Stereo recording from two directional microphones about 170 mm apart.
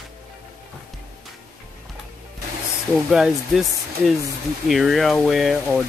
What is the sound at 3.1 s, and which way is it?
Speech, 5° right (ahead or behind).